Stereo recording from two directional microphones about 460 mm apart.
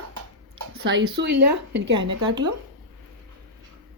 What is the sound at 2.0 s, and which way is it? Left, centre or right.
Speech, centre.